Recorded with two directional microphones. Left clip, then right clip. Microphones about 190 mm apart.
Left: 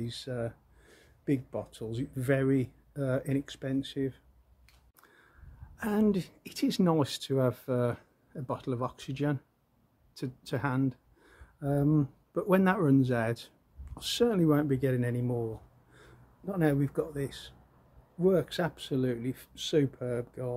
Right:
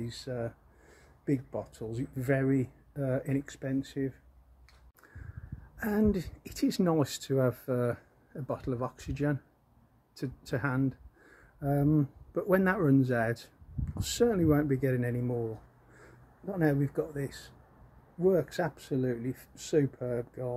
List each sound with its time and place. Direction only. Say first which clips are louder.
0.0 s a woman's voice: left 1 dB; centre (ahead or behind)
5.8 s a woman's voice: even; centre (ahead or behind)
16.4 s a woman's voice: even; centre (ahead or behind)
17.3 s speech: left 2 dB; 50° left (ahead or behind)
18.2 s a woman's voice: even; centre (ahead or behind)